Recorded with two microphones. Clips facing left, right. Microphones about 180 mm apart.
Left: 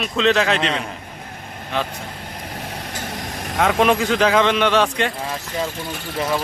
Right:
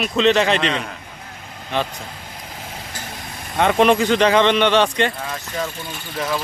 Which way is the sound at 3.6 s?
Centre (ahead or behind).